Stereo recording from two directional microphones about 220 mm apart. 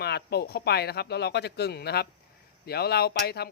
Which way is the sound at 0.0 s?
45° left (ahead or behind).